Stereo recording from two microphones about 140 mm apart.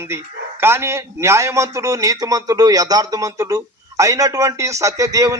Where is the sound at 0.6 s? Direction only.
20° right (ahead or behind).